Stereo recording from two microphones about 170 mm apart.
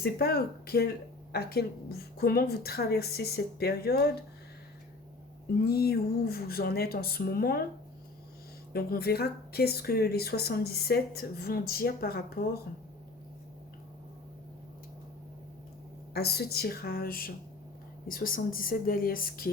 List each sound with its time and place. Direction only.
0.0 s speech: 65° left (ahead or behind)
5.6 s speech: 65° left (ahead or behind)
8.7 s speech: 65° left (ahead or behind)
16.1 s speech: 70° left (ahead or behind)